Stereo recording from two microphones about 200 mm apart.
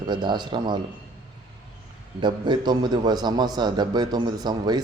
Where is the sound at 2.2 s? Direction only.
25° right (ahead or behind).